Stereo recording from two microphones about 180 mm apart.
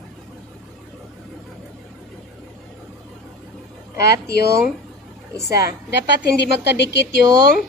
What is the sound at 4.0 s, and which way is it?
Speech, 65° left (ahead or behind).